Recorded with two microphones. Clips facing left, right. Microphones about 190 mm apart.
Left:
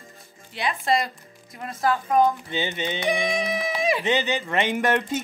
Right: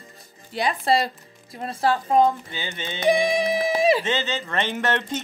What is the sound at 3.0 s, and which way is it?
Speech, 30° right (ahead or behind).